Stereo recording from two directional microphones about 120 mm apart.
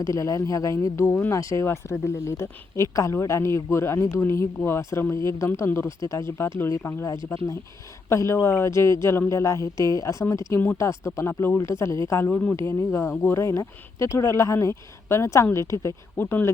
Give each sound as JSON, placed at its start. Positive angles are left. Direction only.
{"t": 0.0, "sound": "speech", "side_deg": 25}